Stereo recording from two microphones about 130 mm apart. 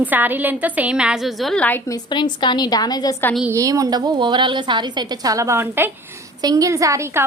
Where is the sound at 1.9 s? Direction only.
35° left (ahead or behind).